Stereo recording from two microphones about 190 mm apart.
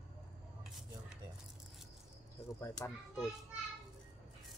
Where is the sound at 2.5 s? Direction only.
15° left (ahead or behind).